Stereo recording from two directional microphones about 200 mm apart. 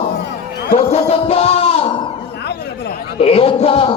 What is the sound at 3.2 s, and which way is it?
Speech, 30° left (ahead or behind).